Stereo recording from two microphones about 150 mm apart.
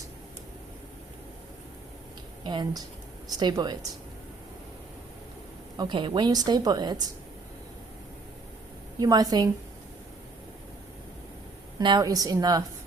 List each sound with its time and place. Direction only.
2.4 s a woman's voice: 30° right (ahead or behind)
5.7 s a woman's voice: 30° right (ahead or behind)
9.0 s a woman's voice: 25° right (ahead or behind)
11.8 s a woman's voice: 30° right (ahead or behind)